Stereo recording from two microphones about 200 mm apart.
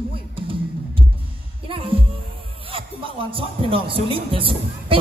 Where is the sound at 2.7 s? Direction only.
25° right (ahead or behind).